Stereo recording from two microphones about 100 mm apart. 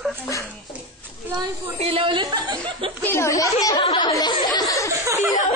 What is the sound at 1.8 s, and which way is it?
Speech, 70° right (ahead or behind).